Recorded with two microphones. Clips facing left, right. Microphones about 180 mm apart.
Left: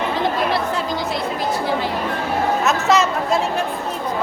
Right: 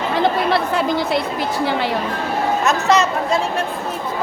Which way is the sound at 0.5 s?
65° right (ahead or behind).